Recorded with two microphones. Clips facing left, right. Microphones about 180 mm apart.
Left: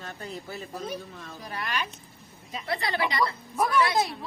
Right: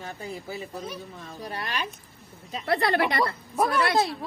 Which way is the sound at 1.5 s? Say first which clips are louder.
Even; 30° right (ahead or behind).